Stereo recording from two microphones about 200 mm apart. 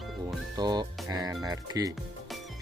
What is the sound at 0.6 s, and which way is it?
Speech, 20° right (ahead or behind).